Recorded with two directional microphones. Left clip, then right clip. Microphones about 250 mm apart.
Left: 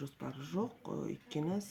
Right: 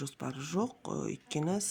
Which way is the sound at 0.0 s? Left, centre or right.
Right.